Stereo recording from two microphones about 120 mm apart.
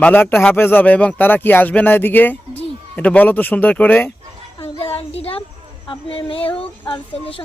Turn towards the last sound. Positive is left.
turn(degrees=45)  # may be behind; listen again after turning